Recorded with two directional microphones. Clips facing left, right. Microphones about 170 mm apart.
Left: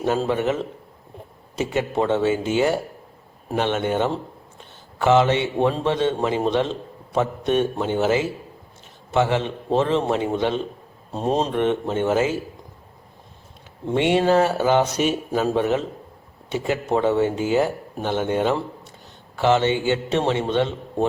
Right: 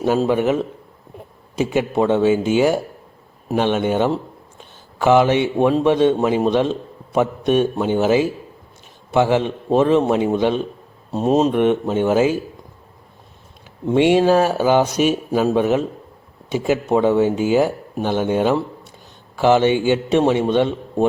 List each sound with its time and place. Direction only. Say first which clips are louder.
0.0 s a man's voice: right 4 dB; 10° right (ahead or behind)
13.9 s a man's voice: right 4 dB; 15° right (ahead or behind)